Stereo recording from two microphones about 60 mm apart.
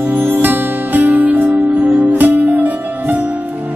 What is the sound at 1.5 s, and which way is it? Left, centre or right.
Music, centre.